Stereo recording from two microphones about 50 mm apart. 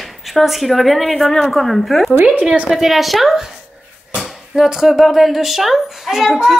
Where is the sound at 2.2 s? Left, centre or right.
Right.